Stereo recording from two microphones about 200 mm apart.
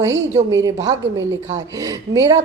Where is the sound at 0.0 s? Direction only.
15° right (ahead or behind).